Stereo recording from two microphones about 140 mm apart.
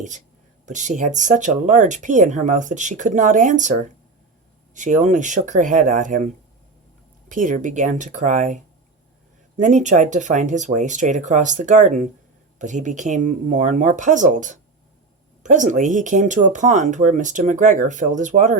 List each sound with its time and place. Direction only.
0.6 s speech: 60° right (ahead or behind)